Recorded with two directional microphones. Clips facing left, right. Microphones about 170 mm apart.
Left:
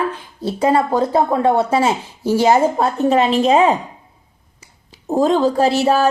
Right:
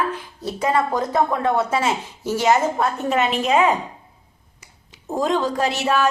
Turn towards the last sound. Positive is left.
turn(degrees=35)  # may be behind; listen again after turning